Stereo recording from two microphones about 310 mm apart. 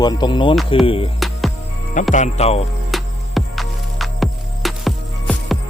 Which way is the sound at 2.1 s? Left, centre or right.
Left.